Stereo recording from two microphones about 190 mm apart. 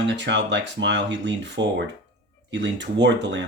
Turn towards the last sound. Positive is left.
turn(degrees=-70)  # may be behind; listen again after turning